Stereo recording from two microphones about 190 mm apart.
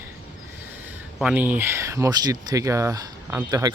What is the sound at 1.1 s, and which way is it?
Speech, 5° right (ahead or behind).